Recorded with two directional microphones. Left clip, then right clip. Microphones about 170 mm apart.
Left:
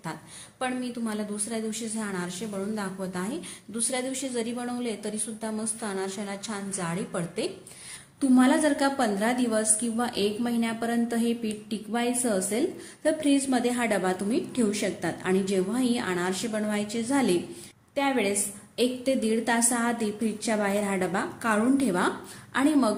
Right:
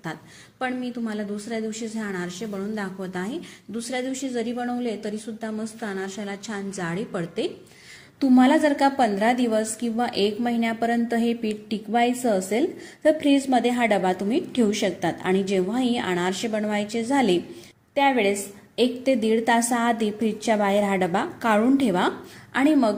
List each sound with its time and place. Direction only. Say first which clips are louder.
0.6 s a woman's voice: right 2 dB; 15° right (ahead or behind)